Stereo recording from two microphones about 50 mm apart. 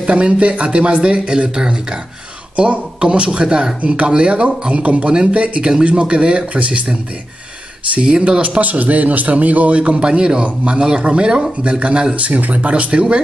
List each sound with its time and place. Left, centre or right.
0.0 s speech: right